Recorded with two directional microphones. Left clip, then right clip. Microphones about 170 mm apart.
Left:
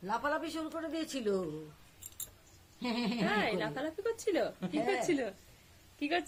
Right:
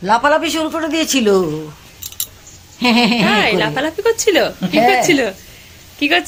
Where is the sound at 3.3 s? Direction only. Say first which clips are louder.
Right 19 dB; 5° left (ahead or behind).